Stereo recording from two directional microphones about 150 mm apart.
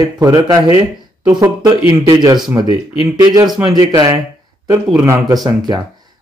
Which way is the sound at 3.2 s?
25° right (ahead or behind).